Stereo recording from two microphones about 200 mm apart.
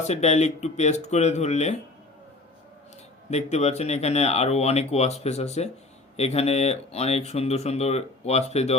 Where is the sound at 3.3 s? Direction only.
35° left (ahead or behind).